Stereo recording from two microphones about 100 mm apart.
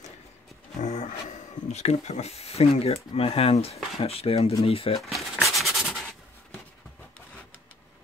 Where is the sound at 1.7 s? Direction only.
90° left; by 5.0 s 70° left (ahead or behind).